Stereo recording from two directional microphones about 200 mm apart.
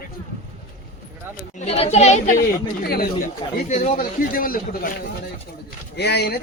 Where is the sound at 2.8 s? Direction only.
50° left (ahead or behind).